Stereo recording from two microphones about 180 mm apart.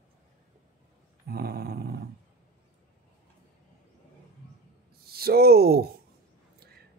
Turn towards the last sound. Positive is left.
turn(degrees=-60)  # may be behind; listen again after turning